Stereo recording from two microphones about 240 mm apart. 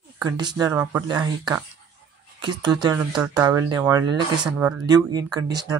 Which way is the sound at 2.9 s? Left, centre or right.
Centre.